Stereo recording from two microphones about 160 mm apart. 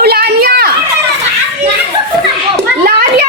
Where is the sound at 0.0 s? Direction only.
80° right.